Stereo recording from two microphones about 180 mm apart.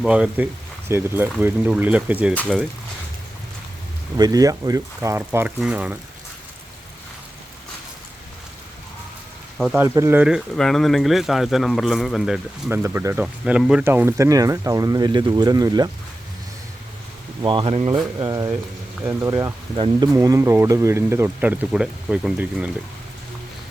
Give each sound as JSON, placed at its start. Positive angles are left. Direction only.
{"t": 0.0, "sound": "speech", "side_deg": -5}
{"t": 2.3, "sound": "speech", "side_deg": 10}
{"t": 4.2, "sound": "speech", "side_deg": -20}
{"t": 9.6, "sound": "speech", "side_deg": 0}
{"t": 9.8, "sound": "speech", "side_deg": -15}
{"t": 17.4, "sound": "speech", "side_deg": -30}